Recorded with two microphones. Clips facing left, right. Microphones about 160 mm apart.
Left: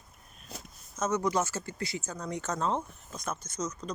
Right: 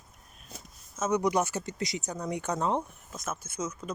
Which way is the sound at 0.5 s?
85° left.